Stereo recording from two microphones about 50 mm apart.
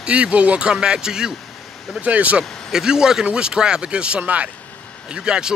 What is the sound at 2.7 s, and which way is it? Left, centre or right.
Speech, centre.